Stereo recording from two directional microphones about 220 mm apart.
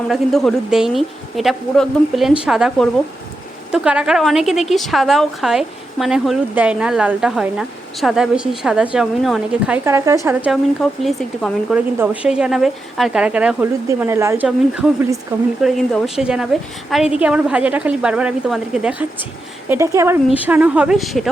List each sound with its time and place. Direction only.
0.1 s a woman's voice: centre (ahead or behind)